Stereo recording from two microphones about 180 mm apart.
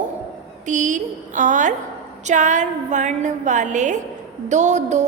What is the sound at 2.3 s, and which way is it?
A woman's voice, 45° right (ahead or behind).